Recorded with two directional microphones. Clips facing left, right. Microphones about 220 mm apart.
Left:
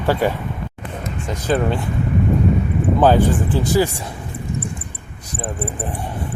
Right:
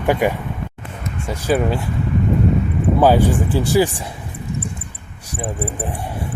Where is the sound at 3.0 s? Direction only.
10° right (ahead or behind).